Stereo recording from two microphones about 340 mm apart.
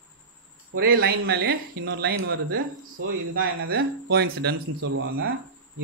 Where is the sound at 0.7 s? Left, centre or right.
Right.